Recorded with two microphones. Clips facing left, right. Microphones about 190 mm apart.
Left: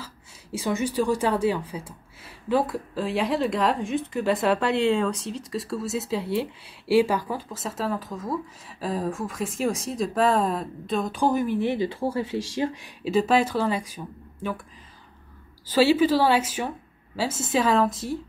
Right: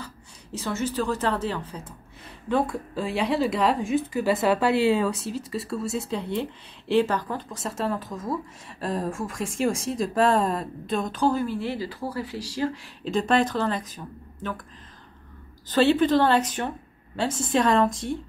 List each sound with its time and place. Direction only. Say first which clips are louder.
0.0 s a woman's voice: right 2 dB; 10° left (ahead or behind)
11.1 s speech: left 2 dB; 15° left (ahead or behind)
13.0 s speech: left 1 dB; 5° left (ahead or behind)
15.7 s speech: even; 5° left (ahead or behind)